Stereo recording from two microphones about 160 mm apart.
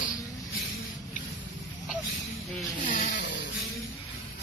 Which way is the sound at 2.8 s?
55° left (ahead or behind).